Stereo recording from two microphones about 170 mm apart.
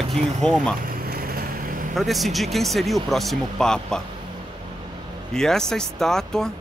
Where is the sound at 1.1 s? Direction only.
60° right (ahead or behind).